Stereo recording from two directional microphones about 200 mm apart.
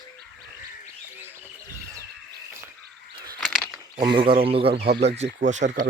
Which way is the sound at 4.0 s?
25° right (ahead or behind).